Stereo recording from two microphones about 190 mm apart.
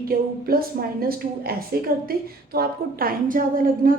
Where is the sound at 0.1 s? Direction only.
50° right (ahead or behind).